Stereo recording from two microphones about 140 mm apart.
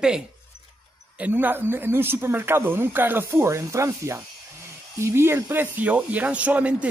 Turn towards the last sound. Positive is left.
turn(degrees=-10)  # may be behind; listen again after turning